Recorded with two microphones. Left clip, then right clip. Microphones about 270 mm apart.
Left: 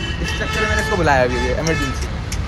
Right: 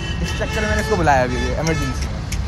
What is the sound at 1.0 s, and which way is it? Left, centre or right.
Speech, right.